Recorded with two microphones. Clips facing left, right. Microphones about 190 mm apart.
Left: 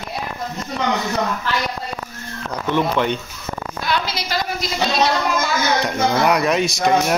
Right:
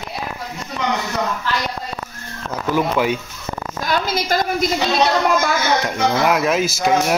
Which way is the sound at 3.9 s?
50° right (ahead or behind).